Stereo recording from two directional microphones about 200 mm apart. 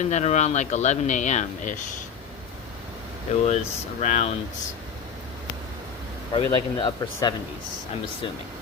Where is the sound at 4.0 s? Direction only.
35° left (ahead or behind).